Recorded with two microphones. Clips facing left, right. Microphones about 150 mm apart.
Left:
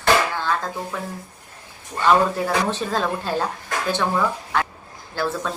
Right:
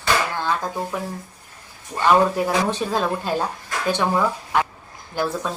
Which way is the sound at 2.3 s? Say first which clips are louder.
Right 1 dB; 15° right (ahead or behind).